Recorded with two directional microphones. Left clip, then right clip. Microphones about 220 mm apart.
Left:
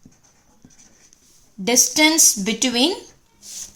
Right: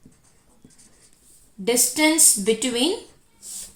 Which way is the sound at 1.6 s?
50° left (ahead or behind).